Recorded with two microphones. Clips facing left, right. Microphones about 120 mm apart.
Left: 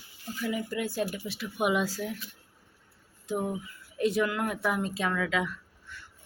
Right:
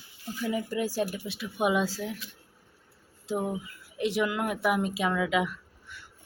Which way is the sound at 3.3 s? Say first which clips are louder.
Right 1 dB; 20° right (ahead or behind).